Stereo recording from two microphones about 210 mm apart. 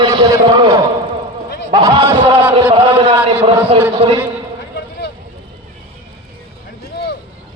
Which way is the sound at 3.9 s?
20° right (ahead or behind).